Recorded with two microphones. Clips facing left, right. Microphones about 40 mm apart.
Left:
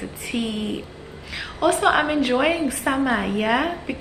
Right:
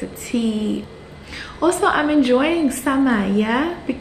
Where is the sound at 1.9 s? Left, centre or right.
Centre.